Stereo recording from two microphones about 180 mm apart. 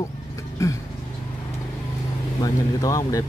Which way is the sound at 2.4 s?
20° left (ahead or behind).